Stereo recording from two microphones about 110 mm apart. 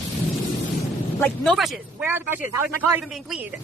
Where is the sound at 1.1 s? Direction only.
10° left (ahead or behind).